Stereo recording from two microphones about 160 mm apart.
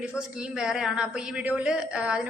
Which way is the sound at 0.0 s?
5° right (ahead or behind).